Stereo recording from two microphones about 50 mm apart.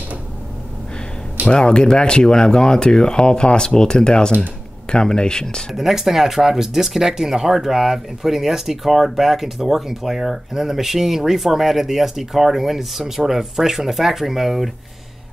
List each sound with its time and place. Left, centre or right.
1.5 s speech: centre
5.7 s speech: centre